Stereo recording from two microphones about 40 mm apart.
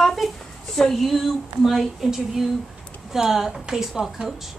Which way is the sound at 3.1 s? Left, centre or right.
Centre.